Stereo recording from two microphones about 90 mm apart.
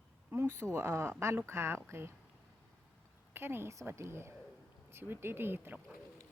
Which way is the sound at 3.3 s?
25° right (ahead or behind).